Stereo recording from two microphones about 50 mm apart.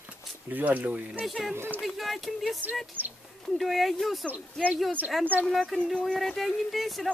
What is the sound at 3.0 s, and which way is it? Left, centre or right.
Speech, left.